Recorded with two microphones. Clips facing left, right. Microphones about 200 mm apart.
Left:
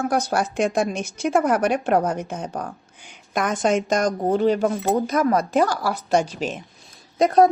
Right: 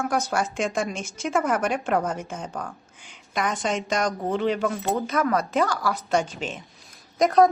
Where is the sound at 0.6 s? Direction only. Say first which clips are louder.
Left 5 dB; 55° left (ahead or behind).